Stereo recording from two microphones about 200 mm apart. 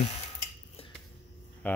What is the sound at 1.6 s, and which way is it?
Speech, 10° left (ahead or behind).